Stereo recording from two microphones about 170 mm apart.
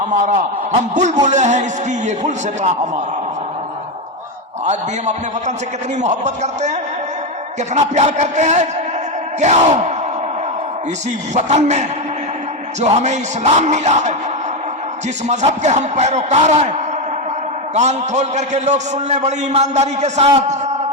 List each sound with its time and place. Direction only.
0.1 s a man's voice: 45° right (ahead or behind)
4.6 s a man's voice: 45° right (ahead or behind)
11.3 s a man's voice: 45° right (ahead or behind)
15.3 s a man's voice: 45° right (ahead or behind)
17.7 s a man's voice: 45° right (ahead or behind)